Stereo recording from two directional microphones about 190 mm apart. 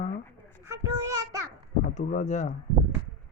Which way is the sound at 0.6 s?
15° right (ahead or behind).